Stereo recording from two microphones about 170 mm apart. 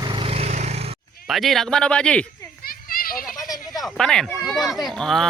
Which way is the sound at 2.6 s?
60° left (ahead or behind).